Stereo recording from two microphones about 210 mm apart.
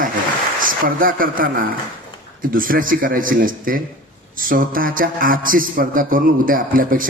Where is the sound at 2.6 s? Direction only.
40° right (ahead or behind).